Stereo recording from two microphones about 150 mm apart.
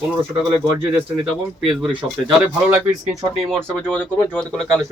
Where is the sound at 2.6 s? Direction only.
20° right (ahead or behind).